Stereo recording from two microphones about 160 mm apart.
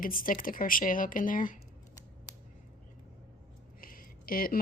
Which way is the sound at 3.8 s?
60° left (ahead or behind).